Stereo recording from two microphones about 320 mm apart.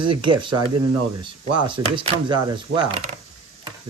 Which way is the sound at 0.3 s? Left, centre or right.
Centre.